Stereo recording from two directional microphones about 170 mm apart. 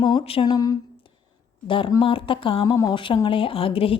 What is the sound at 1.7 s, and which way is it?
A woman's voice, 25° left (ahead or behind).